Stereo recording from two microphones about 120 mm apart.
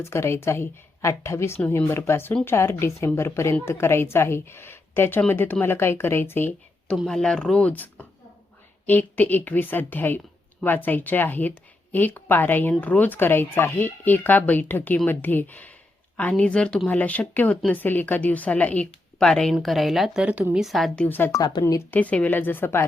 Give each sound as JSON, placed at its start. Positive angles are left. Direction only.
{"t": 0.0, "sound": "a woman's voice", "side_deg": 20}
{"t": 6.8, "sound": "speech", "side_deg": 0}
{"t": 20.2, "sound": "speech", "side_deg": -10}
{"t": 21.3, "sound": "speech", "side_deg": 35}
{"t": 21.6, "sound": "speech", "side_deg": 20}